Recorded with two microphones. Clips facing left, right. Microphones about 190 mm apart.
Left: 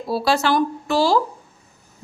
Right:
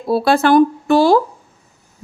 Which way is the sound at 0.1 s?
55° right (ahead or behind).